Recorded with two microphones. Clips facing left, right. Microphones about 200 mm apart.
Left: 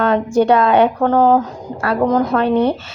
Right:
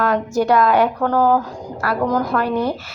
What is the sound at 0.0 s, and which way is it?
Speech, 25° left (ahead or behind).